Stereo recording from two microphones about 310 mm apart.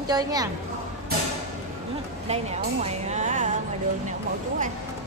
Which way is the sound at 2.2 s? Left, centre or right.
Centre.